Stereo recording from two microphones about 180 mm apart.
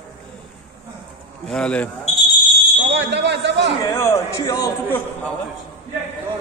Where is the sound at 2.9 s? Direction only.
75° right (ahead or behind).